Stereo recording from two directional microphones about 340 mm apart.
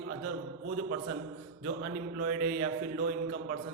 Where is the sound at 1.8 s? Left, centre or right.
Right.